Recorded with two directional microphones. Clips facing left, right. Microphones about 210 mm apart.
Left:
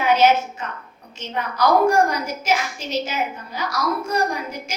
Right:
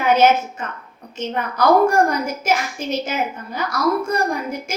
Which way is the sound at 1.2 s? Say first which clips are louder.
Right 2 dB; 50° right (ahead or behind).